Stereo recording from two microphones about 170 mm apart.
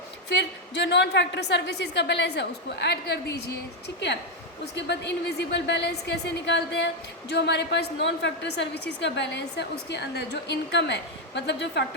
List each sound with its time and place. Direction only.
0.3 s a woman's voice: 85° left